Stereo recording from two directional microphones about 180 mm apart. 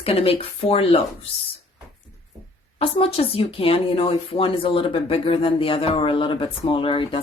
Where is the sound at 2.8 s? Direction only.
30° left (ahead or behind).